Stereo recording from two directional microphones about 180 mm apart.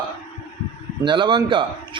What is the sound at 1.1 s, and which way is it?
Speech, 25° right (ahead or behind).